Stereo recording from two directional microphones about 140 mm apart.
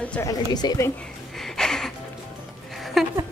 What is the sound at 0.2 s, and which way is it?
Speech, 25° left (ahead or behind).